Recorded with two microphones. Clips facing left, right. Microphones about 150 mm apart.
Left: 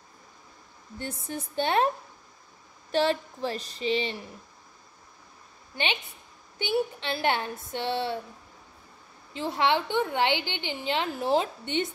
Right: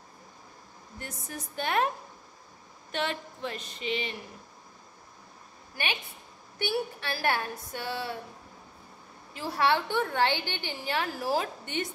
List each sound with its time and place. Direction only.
0.9 s a woman's voice: 30° left (ahead or behind)
2.9 s a woman's voice: 35° left (ahead or behind)
6.6 s a woman's voice: 20° left (ahead or behind)
9.3 s a woman's voice: 20° left (ahead or behind)